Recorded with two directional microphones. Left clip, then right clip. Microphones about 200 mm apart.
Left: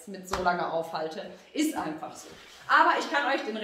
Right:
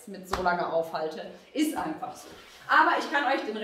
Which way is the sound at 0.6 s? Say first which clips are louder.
Right 2 dB; 20° left (ahead or behind).